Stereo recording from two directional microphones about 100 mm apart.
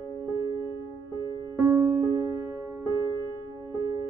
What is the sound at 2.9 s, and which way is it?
Music, 35° right (ahead or behind).